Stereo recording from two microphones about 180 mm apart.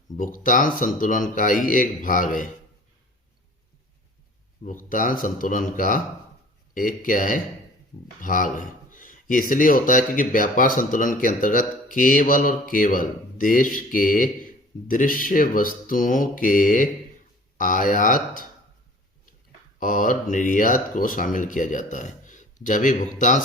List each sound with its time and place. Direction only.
0.2 s speech: 50° left (ahead or behind)
4.6 s speech: 45° left (ahead or behind)
19.8 s speech: 50° left (ahead or behind)